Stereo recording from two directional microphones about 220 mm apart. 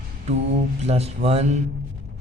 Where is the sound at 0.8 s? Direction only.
30° right (ahead or behind).